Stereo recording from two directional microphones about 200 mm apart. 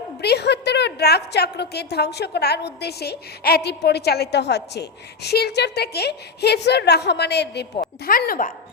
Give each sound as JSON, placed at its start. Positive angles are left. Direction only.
{"t": 0.2, "sound": "a woman's voice", "side_deg": 55}